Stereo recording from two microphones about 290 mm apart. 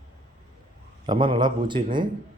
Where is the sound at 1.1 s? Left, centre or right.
Centre.